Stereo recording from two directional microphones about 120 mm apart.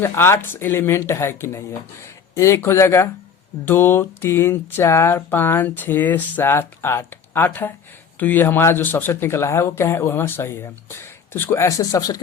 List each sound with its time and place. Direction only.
0.0 s speech: 20° left (ahead or behind)